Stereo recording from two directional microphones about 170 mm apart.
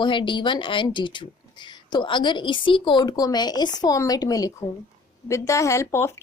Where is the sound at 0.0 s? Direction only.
30° left (ahead or behind).